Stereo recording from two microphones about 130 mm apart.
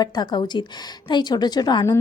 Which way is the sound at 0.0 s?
30° left (ahead or behind).